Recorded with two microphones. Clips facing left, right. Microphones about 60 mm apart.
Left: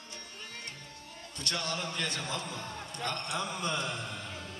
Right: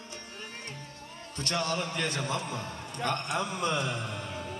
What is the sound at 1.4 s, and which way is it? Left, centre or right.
A man's voice, right.